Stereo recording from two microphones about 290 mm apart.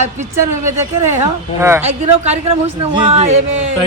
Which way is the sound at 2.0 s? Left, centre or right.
Right.